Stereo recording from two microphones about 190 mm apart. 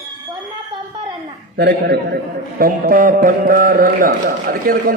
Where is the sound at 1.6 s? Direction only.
60° right (ahead or behind).